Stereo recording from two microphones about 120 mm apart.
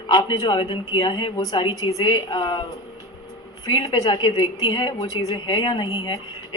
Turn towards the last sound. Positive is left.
turn(degrees=35)  # may be behind; listen again after turning